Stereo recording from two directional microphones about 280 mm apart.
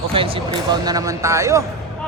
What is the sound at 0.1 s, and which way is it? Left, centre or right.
Speech, centre.